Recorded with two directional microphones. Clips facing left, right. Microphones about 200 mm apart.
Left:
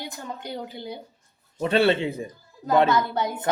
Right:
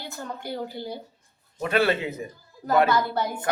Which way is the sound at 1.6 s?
30° left (ahead or behind).